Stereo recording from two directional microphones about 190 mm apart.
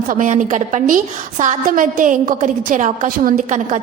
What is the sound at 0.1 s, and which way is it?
A woman's voice, 45° right (ahead or behind).